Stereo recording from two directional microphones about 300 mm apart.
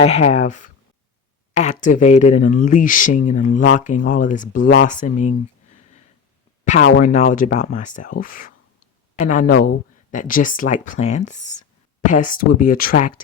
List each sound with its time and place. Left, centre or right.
0.0 s speech: left
5.0 s speech: left
6.8 s speech: left